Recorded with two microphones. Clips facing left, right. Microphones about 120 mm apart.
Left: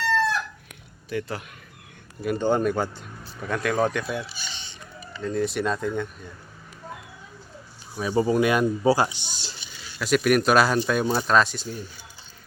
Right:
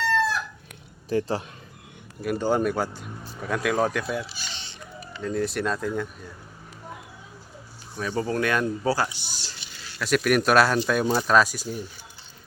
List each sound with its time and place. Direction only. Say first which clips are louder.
0.0 s chicken: even; centre (ahead or behind)
1.1 s a man's voice: right 5 dB; 35° right (ahead or behind)
2.2 s speech: left 1 dB; 5° right (ahead or behind)
7.9 s speech: left 5 dB; 15° left (ahead or behind)
10.0 s speech: left 1 dB; centre (ahead or behind)